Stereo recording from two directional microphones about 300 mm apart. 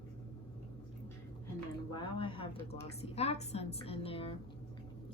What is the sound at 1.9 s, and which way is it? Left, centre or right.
Speech, centre.